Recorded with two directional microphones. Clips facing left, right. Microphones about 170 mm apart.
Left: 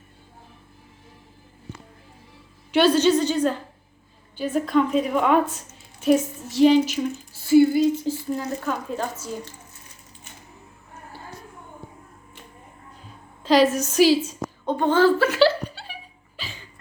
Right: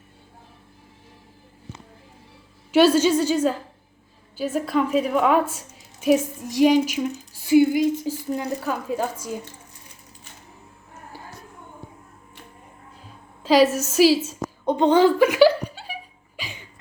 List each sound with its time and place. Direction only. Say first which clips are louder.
2.7 s a woman's voice: right 1 dB; 10° right (ahead or behind)
13.4 s speech: right 1 dB; 10° right (ahead or behind)
14.6 s a woman's voice: right 2 dB; 20° right (ahead or behind)
16.4 s a sound: right 2 dB; 15° right (ahead or behind)